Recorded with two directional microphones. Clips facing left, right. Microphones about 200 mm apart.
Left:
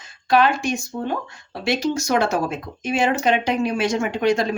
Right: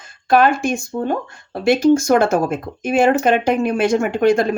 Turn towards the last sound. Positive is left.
turn(degrees=-55)  # may be behind; listen again after turning